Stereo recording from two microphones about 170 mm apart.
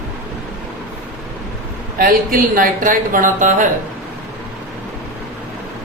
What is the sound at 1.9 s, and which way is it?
Speech, 55° right (ahead or behind).